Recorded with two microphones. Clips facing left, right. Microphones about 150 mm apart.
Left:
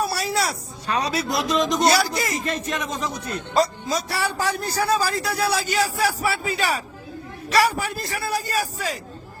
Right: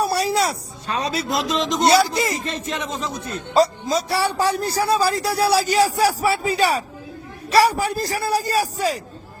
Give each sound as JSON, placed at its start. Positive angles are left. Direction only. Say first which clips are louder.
{"t": 0.2, "sound": "a woman's voice", "louder": "right 4 dB", "side_deg": -30}